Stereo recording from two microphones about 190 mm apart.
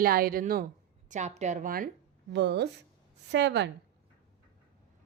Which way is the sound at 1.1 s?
40° right (ahead or behind).